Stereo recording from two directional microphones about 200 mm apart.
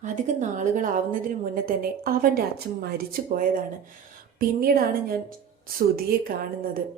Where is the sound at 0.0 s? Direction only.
40° right (ahead or behind).